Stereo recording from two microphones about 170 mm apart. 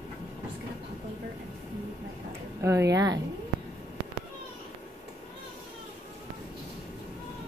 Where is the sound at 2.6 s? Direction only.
15° right (ahead or behind).